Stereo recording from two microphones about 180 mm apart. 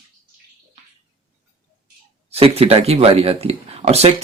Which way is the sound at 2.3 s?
35° right (ahead or behind).